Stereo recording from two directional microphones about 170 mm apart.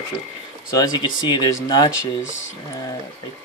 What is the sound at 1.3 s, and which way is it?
Speech, 25° left (ahead or behind).